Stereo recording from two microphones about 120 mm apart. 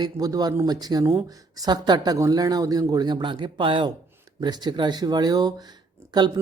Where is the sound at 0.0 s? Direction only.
35° right (ahead or behind).